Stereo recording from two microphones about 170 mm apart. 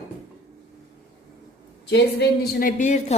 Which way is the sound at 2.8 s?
45° left (ahead or behind).